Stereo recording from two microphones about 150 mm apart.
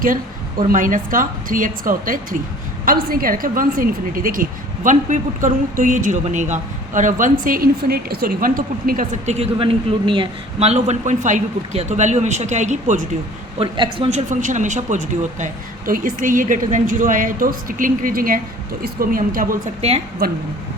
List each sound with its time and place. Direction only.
0.7 s a woman's voice: 60° right (ahead or behind)
2.8 s a woman's voice: 75° right (ahead or behind); by 9.5 s 50° right (ahead or behind)
9.6 s speech: 35° right (ahead or behind); by 13.1 s 55° right (ahead or behind)
13.6 s speech: 30° right (ahead or behind)
14.1 s a woman's voice: 55° right (ahead or behind)
15.9 s a woman's voice: 65° right (ahead or behind)
20.2 s a woman's voice: 85° right